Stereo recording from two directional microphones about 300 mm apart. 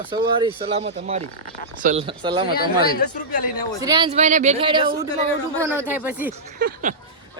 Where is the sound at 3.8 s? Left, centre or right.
Centre.